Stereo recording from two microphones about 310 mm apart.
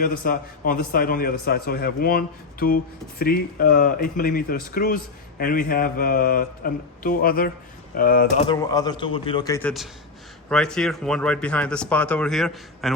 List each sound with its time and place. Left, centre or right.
0.0 s a man's voice: left
8.4 s a man's voice: centre